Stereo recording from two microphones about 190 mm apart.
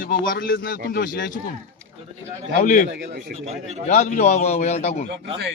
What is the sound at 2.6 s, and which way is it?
Speech, 45° left (ahead or behind).